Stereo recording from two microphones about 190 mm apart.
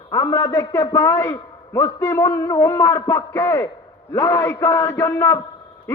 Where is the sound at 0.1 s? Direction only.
15° left (ahead or behind).